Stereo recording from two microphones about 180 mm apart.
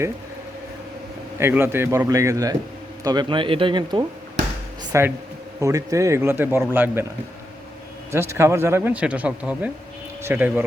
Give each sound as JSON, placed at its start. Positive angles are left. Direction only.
{"t": 1.4, "sound": "speech", "side_deg": -15}
{"t": 4.9, "sound": "speech", "side_deg": -15}
{"t": 8.1, "sound": "speech", "side_deg": -15}